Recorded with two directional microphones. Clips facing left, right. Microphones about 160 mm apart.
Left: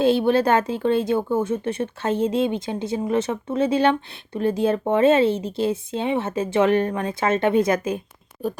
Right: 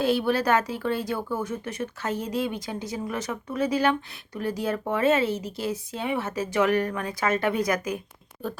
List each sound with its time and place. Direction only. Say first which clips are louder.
0.0 s speech: left 5 dB; 25° left (ahead or behind)